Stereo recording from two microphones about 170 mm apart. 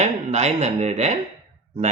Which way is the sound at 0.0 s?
40° right (ahead or behind).